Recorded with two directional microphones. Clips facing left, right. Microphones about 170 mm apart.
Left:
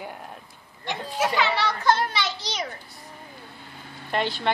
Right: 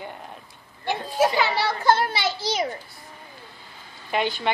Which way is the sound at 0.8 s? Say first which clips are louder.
Right 4 dB; 5° right (ahead or behind).